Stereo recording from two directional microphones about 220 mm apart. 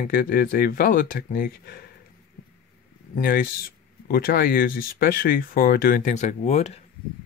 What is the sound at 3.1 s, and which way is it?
Speech, 40° left (ahead or behind).